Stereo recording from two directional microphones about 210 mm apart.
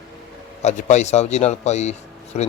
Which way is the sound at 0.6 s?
35° left (ahead or behind).